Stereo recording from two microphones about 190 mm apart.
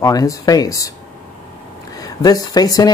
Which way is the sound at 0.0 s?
20° left (ahead or behind).